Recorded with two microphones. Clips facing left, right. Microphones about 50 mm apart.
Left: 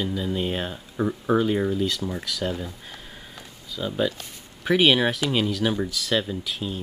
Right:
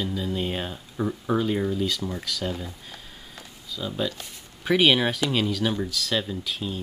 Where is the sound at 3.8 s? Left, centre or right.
Centre.